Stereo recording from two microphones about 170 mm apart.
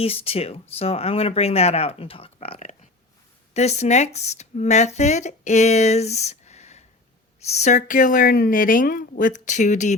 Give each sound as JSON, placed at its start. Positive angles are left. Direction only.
{"t": 0.0, "sound": "speech", "side_deg": 35}